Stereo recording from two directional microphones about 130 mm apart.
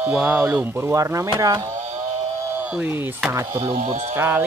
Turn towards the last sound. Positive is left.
turn(degrees=-15)  # may be behind; listen again after turning